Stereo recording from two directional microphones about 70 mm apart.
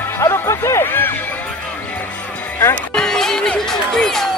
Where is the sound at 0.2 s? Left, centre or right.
Left.